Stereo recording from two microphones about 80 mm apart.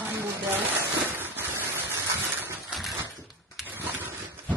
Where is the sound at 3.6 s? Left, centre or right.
Right.